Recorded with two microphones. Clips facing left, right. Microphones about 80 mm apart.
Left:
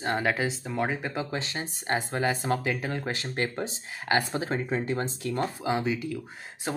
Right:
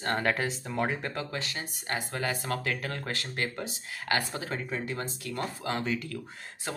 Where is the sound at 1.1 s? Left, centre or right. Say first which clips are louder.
Left 3 dB; left.